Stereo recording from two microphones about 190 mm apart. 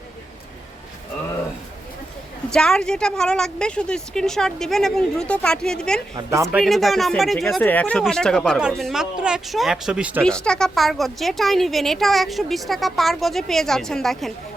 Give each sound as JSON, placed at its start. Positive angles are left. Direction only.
{"t": 2.5, "sound": "a woman's voice", "side_deg": 5}
{"t": 6.1, "sound": "speech", "side_deg": -15}
{"t": 6.6, "sound": "a woman's voice", "side_deg": 0}
{"t": 10.2, "sound": "a woman's voice", "side_deg": 5}